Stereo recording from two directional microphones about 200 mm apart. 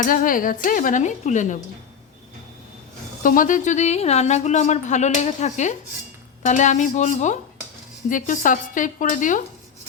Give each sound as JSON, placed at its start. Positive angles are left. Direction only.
{"t": 0.0, "sound": "speech", "side_deg": 40}
{"t": 3.2, "sound": "speech", "side_deg": 40}